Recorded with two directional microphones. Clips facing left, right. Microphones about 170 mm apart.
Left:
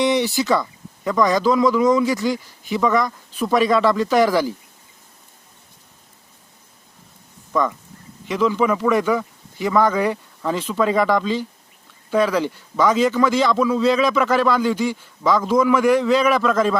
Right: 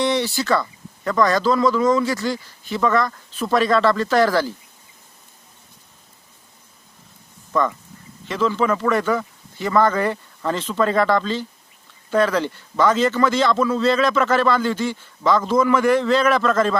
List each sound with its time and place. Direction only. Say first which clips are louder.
0.0 s guitar: left 2 dB; 15° left (ahead or behind)
1.0 s a man's voice: left 1 dB; 15° left (ahead or behind)
8.3 s a man's voice: left 1 dB; 10° left (ahead or behind)